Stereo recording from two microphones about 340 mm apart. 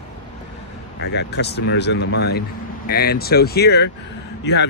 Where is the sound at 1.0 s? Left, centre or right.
Left.